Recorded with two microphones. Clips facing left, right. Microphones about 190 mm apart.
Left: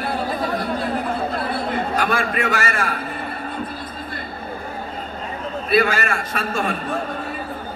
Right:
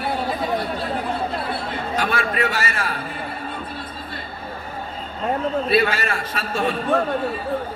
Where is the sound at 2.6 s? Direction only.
50° left (ahead or behind).